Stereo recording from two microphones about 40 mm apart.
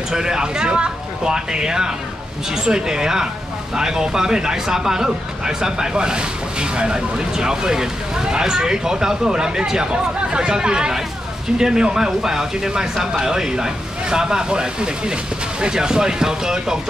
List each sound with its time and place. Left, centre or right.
0.1 s speech: centre